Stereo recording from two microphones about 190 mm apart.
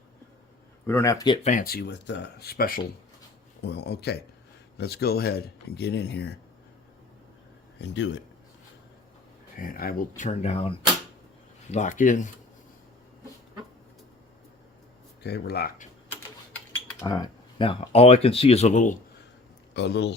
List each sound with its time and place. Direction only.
0.9 s speech: 15° left (ahead or behind)
1.5 s speech: 50° left (ahead or behind)
7.8 s speech: 70° left (ahead or behind)
9.6 s speech: 50° left (ahead or behind)
15.2 s speech: 60° left (ahead or behind)
17.0 s speech: 20° left (ahead or behind); by 18.9 s 40° left (ahead or behind)
19.7 s speech: 60° left (ahead or behind)